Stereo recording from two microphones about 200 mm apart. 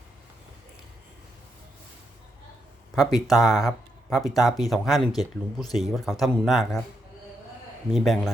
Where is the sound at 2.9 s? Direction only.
Centre (ahead or behind).